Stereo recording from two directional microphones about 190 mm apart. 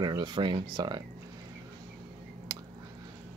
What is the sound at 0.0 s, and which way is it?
Speech, 25° right (ahead or behind).